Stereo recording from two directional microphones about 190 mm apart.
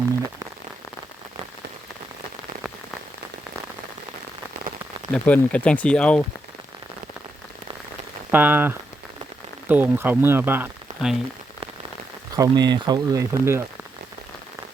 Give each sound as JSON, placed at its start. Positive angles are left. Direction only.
{"t": 5.1, "sound": "speech", "side_deg": 5}
{"t": 8.3, "sound": "speech", "side_deg": -10}
{"t": 12.4, "sound": "speech", "side_deg": -20}